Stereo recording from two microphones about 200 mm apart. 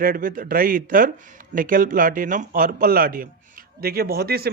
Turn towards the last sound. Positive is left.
turn(degrees=-50)  # may be behind; listen again after turning